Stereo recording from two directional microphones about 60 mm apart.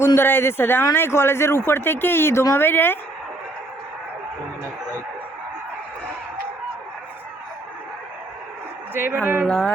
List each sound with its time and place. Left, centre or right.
0.2 s speech: left
8.9 s speech: right
9.5 s speech: centre